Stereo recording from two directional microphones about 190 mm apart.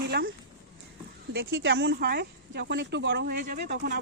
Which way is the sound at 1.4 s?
60° right (ahead or behind).